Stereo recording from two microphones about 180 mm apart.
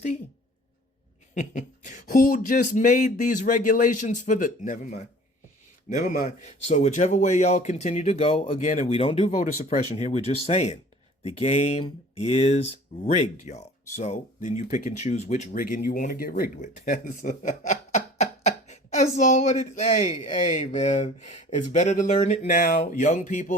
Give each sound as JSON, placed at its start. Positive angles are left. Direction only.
{"t": 1.4, "sound": "speech", "side_deg": 45}
{"t": 15.5, "sound": "speech", "side_deg": 55}